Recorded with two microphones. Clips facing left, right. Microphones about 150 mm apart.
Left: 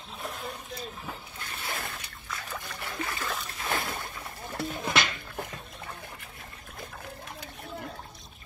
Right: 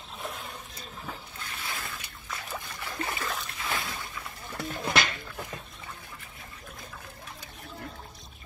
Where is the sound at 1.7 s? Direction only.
60° left (ahead or behind).